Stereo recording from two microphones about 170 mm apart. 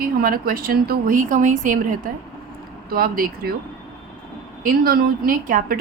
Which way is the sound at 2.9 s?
60° right (ahead or behind).